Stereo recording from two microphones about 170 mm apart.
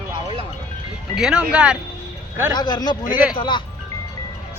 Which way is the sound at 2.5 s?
25° left (ahead or behind).